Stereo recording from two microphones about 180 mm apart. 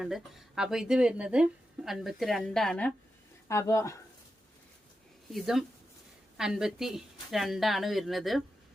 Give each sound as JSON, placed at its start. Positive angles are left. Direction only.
{"t": 0.0, "sound": "speech", "side_deg": 0}
{"t": 3.5, "sound": "speech", "side_deg": 15}
{"t": 5.3, "sound": "speech", "side_deg": 0}